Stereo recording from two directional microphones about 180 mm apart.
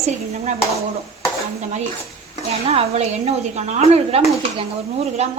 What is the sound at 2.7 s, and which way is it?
Speech, 35° right (ahead or behind).